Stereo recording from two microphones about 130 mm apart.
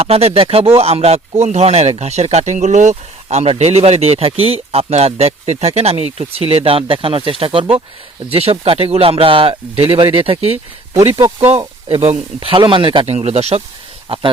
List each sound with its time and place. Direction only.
0.0 s speech: 50° right (ahead or behind)
11.3 s speech: 50° right (ahead or behind)
13.1 s speech: 55° right (ahead or behind)